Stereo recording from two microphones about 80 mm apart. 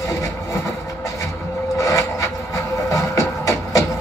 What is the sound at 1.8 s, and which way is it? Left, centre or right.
Wood, left.